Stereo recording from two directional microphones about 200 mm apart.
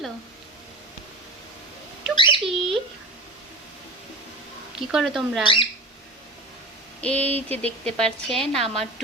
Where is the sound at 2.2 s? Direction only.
25° left (ahead or behind).